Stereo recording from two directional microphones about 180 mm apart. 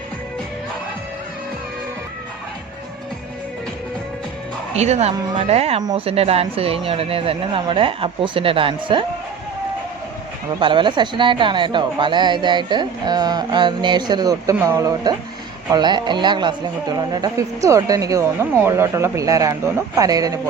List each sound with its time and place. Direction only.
4.7 s speech: 35° right (ahead or behind)
10.5 s a woman's voice: 25° right (ahead or behind)